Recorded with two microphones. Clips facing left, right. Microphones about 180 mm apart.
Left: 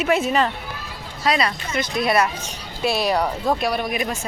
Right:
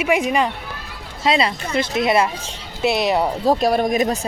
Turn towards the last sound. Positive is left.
turn(degrees=-40)  # may be behind; listen again after turning